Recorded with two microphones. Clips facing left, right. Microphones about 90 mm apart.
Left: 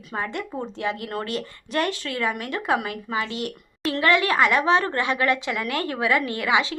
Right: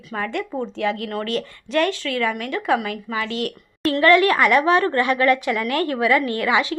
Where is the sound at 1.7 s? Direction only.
30° left (ahead or behind).